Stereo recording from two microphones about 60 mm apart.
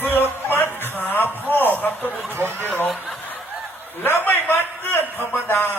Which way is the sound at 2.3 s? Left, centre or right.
Right.